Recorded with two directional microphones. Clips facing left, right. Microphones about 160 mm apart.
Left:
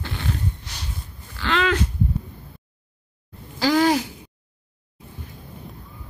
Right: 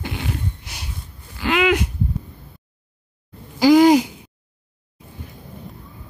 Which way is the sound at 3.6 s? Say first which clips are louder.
Right 7 dB; 15° right (ahead or behind).